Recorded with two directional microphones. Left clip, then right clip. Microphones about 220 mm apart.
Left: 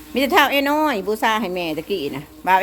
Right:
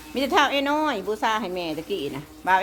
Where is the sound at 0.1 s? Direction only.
20° left (ahead or behind).